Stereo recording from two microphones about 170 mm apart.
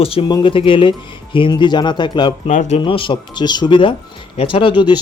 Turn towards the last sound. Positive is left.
turn(degrees=25)  # may be behind; listen again after turning